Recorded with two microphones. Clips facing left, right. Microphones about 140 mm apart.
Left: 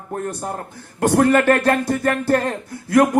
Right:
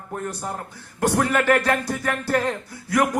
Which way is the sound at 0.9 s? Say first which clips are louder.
Left 6 dB; 55° left (ahead or behind).